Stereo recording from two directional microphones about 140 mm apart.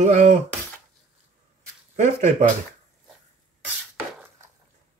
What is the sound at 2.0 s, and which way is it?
Speech, 60° right (ahead or behind).